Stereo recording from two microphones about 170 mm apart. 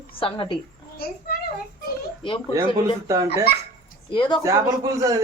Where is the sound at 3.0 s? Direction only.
20° right (ahead or behind).